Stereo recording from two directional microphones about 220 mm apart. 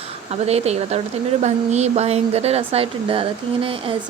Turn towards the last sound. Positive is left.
turn(degrees=-25)  # may be behind; listen again after turning